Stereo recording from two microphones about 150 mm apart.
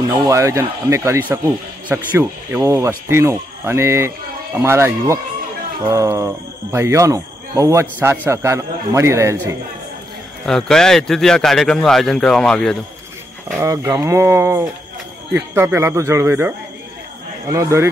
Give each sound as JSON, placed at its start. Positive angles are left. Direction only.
{"t": 0.1, "sound": "speech", "side_deg": -20}
{"t": 10.4, "sound": "speech", "side_deg": 5}
{"t": 13.6, "sound": "speech", "side_deg": -15}